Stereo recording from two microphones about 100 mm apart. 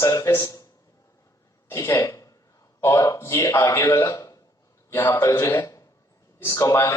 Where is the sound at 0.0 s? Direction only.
30° left (ahead or behind).